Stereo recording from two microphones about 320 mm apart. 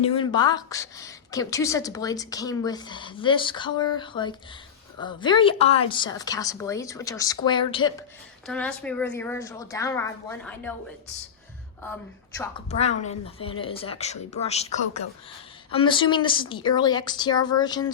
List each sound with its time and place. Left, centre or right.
0.0 s a woman's voice: centre
8.4 s a woman's voice: centre
12.4 s a woman's voice: centre